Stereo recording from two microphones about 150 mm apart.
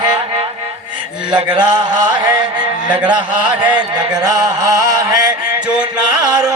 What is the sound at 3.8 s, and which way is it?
Music, 30° right (ahead or behind).